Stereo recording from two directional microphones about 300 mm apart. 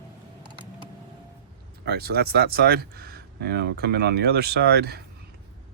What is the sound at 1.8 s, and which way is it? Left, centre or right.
Speech, right.